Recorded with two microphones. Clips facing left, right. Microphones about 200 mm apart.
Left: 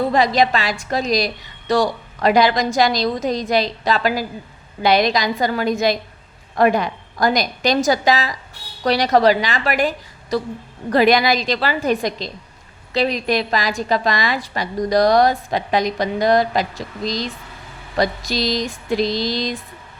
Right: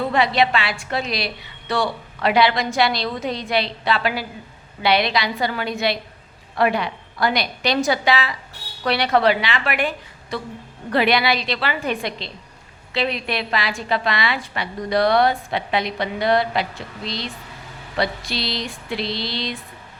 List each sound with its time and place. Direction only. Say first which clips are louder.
0.1 s a woman's voice: left 2 dB; 40° left (ahead or behind)